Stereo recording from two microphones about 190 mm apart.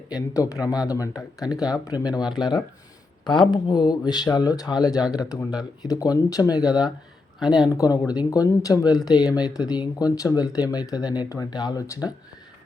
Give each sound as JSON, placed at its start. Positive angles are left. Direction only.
{"t": 0.1, "sound": "speech", "side_deg": 15}